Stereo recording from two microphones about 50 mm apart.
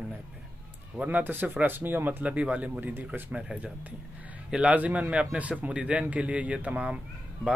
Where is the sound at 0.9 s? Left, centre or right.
Right.